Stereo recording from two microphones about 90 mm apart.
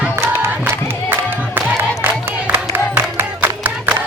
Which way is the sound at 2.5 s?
20° right (ahead or behind).